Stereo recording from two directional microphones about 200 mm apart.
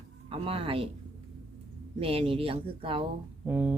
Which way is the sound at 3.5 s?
5° right (ahead or behind).